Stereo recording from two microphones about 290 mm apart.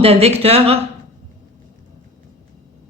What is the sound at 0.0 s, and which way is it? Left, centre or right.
Speech, right.